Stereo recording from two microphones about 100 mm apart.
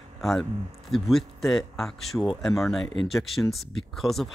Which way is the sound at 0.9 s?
Centre (ahead or behind).